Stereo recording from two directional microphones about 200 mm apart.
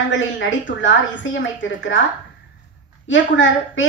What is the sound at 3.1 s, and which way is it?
Speech, 70° left (ahead or behind).